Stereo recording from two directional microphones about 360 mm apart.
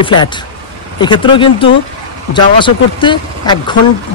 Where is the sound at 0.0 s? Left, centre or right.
Centre.